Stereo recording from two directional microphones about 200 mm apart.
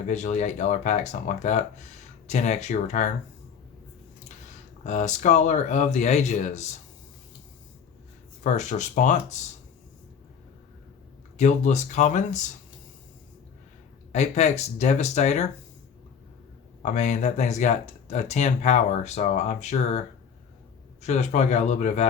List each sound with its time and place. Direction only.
0.1 s speech: 35° left (ahead or behind)
4.8 s speech: 35° left (ahead or behind)
8.5 s speech: 35° left (ahead or behind)
11.3 s speech: 35° left (ahead or behind)
14.1 s speech: 35° left (ahead or behind)
16.8 s speech: 35° left (ahead or behind)
21.0 s speech: 35° left (ahead or behind)